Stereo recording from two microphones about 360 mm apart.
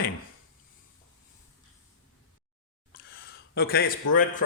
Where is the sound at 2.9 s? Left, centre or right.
Left.